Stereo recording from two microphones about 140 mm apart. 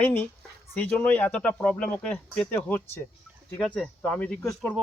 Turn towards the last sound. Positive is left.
turn(degrees=10)  # may be behind; listen again after turning